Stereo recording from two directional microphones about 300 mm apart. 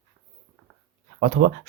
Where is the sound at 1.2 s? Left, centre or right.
Right.